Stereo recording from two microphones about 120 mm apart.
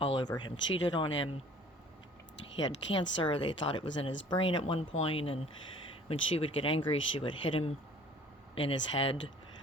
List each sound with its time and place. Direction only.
0.0 s speech: 40° left (ahead or behind)
3.0 s speech: 45° left (ahead or behind)